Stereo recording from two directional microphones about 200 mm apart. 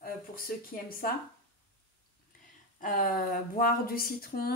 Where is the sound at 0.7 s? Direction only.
40° left (ahead or behind).